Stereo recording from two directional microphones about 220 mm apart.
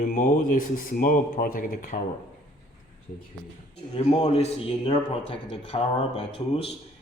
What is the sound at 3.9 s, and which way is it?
A man's voice, 25° left (ahead or behind).